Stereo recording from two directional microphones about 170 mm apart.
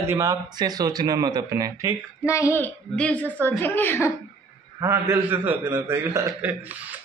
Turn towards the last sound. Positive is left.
turn(degrees=-15)  # may be behind; listen again after turning